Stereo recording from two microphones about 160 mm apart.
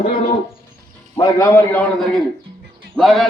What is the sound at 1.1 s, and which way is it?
Speech, 25° left (ahead or behind).